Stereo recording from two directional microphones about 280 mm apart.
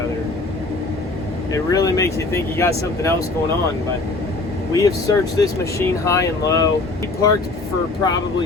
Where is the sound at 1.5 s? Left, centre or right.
Centre.